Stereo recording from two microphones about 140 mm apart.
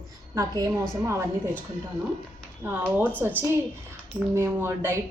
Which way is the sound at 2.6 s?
15° right (ahead or behind).